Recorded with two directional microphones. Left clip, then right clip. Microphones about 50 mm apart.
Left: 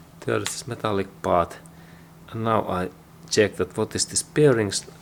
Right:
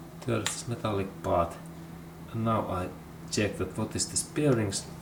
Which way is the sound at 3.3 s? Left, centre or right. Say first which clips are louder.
Left 10 dB; left.